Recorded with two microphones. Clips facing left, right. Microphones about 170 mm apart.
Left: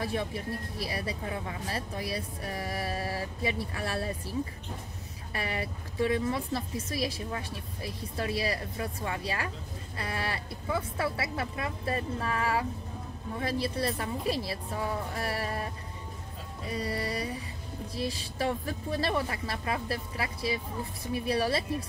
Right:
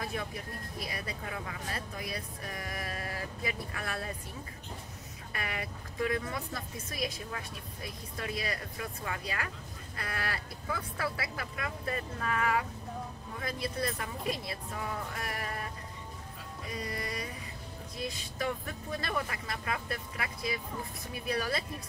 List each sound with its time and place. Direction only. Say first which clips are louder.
0.0 s speech: left 5 dB; 30° left (ahead or behind)